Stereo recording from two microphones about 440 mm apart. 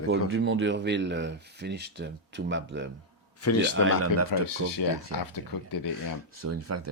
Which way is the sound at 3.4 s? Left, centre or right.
Left.